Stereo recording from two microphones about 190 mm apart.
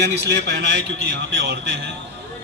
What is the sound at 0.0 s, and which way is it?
A man's voice, 65° right (ahead or behind).